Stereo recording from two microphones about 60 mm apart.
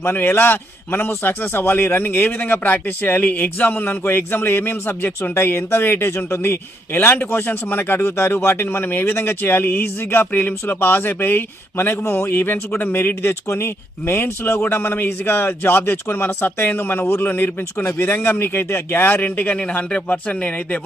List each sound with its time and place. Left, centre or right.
0.0 s a man's voice: left